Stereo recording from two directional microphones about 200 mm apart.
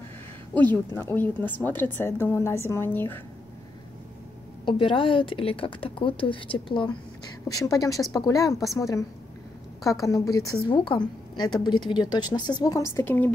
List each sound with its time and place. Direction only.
0.6 s a woman's voice: 10° left (ahead or behind)
4.6 s a woman's voice: 25° left (ahead or behind); by 13.3 s 10° left (ahead or behind)